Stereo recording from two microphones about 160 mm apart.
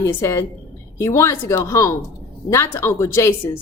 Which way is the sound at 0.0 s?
15° left (ahead or behind).